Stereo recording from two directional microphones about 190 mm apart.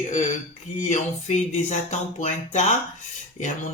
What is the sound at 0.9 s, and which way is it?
Speech, 40° left (ahead or behind).